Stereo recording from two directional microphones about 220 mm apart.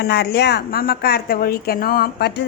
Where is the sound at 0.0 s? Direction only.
45° left (ahead or behind).